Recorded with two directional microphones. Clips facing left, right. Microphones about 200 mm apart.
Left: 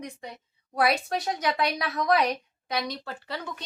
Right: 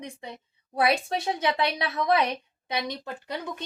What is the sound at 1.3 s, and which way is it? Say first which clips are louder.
A woman's voice: right 1 dB; 25° right (ahead or behind).